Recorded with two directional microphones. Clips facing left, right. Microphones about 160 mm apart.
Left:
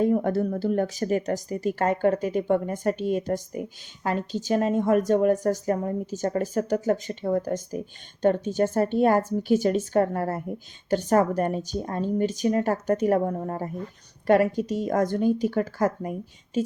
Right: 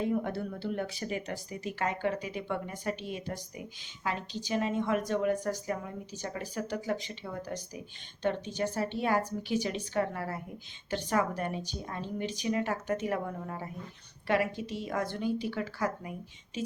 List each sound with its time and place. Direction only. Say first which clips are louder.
0.0 s speech: left 9 dB; 45° left (ahead or behind)